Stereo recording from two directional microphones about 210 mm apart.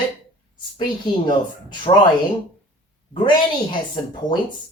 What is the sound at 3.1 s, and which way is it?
A woman's voice, 25° left (ahead or behind).